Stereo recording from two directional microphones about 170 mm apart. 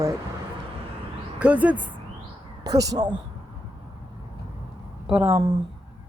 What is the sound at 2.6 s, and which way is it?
Speech, 20° right (ahead or behind).